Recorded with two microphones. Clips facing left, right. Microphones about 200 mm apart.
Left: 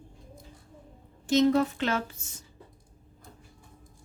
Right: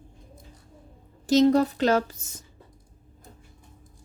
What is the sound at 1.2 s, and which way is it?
Speech, 40° right (ahead or behind).